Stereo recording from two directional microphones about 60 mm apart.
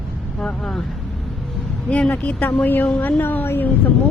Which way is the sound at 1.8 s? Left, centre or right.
Left.